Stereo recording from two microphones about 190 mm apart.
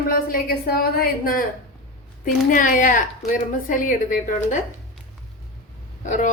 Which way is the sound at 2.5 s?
45° left (ahead or behind).